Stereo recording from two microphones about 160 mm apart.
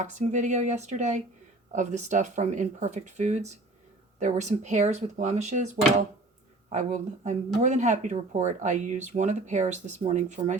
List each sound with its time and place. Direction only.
0.0 s speech: 50° right (ahead or behind)